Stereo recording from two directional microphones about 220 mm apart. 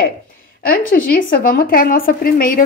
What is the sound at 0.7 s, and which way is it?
A woman's voice, 40° left (ahead or behind).